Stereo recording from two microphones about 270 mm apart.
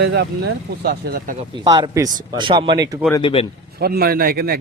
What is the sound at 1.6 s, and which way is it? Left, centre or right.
A man's voice, centre.